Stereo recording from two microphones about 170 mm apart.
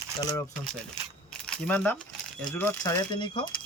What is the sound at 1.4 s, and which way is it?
Speech, 5° left (ahead or behind).